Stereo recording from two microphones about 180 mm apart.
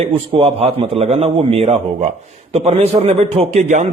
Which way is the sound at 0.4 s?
35° right (ahead or behind).